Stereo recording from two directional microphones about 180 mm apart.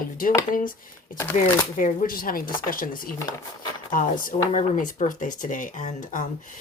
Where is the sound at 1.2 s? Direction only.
15° left (ahead or behind).